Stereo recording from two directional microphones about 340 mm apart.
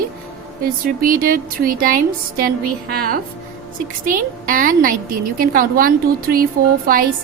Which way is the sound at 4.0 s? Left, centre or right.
Right.